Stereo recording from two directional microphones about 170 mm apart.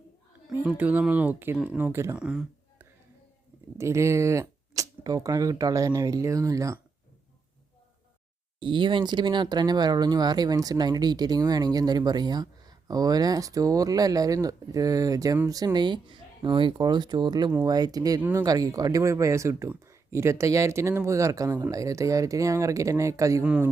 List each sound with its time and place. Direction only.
0.8 s speech: 10° right (ahead or behind)
3.8 s speech: 15° right (ahead or behind)
8.5 s speech: 30° right (ahead or behind)
18.2 s speech: 10° right (ahead or behind)
23.4 s speech: 5° right (ahead or behind)